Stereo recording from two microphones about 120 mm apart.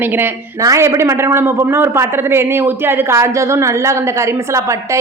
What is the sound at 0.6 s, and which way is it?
A man's voice, 30° right (ahead or behind).